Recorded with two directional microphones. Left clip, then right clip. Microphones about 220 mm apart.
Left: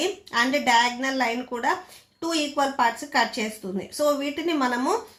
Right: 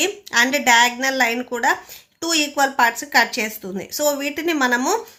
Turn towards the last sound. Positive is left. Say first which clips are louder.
# right 5 dB
turn(degrees=-30)  # may be behind; listen again after turning